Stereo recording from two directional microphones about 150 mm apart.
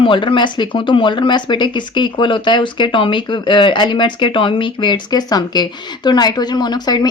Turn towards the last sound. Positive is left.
turn(degrees=25)  # may be behind; listen again after turning